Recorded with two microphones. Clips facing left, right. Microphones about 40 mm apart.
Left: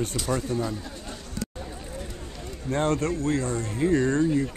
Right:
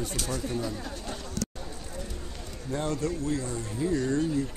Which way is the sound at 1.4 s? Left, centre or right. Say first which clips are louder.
Left 1 dB; centre.